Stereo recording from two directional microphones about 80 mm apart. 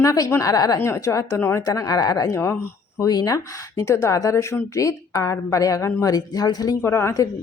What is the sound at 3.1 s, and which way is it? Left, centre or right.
Speech, left.